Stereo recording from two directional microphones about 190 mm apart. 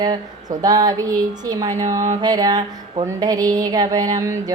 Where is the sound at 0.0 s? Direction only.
20° right (ahead or behind).